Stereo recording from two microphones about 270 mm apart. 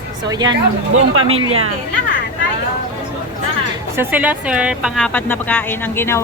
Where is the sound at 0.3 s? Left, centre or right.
Centre.